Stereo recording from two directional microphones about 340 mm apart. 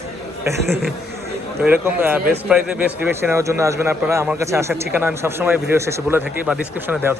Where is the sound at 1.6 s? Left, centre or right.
Centre.